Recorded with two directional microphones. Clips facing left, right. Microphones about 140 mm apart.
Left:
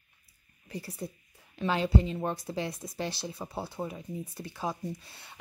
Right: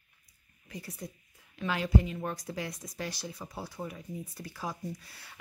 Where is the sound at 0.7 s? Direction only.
30° left (ahead or behind).